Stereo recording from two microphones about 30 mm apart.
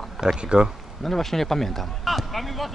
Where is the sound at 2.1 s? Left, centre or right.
Centre.